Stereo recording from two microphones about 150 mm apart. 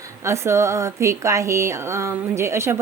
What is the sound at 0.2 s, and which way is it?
A woman's voice, 20° right (ahead or behind).